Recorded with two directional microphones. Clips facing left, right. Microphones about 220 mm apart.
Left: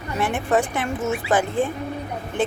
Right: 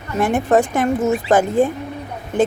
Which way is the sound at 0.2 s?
40° right (ahead or behind).